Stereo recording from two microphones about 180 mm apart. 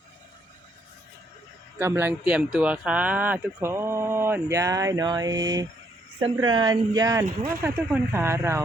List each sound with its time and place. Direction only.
1.8 s speech: 10° right (ahead or behind)